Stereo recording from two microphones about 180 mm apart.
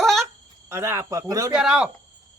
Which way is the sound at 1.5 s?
5° right (ahead or behind).